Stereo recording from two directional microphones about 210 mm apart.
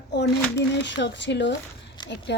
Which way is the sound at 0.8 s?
60° left (ahead or behind).